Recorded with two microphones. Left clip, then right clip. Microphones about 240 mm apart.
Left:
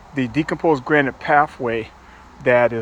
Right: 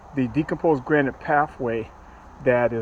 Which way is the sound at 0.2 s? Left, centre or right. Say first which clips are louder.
Left 3 dB; left.